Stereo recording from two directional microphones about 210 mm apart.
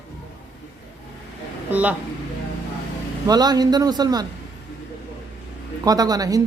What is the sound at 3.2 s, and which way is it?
A man's voice, 20° right (ahead or behind).